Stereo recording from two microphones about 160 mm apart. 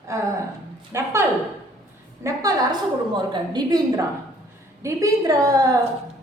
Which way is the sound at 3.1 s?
25° right (ahead or behind).